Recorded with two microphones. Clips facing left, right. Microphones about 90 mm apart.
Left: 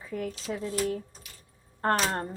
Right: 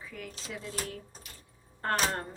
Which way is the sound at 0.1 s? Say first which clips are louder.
Left 10 dB; 35° left (ahead or behind).